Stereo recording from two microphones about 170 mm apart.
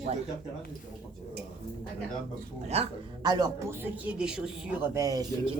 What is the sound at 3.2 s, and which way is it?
Speech, 25° right (ahead or behind).